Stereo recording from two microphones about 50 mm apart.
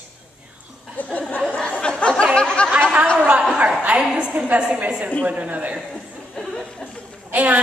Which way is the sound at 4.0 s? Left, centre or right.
Centre.